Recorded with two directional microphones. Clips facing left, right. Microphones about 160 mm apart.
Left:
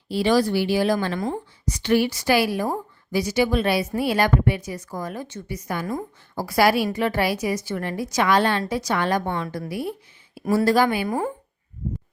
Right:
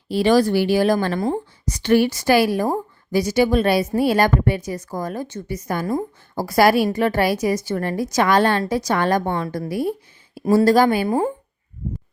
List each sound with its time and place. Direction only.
0.1 s a woman's voice: 50° right (ahead or behind); by 11.3 s 35° right (ahead or behind)